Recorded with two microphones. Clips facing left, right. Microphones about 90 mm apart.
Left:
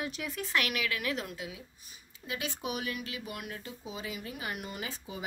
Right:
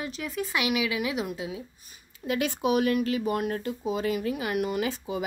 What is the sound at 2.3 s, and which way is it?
Speech, 65° right (ahead or behind).